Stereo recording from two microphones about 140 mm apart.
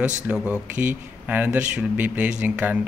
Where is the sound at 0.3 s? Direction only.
10° right (ahead or behind).